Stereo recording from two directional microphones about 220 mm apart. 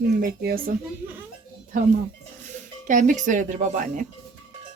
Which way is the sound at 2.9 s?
35° right (ahead or behind).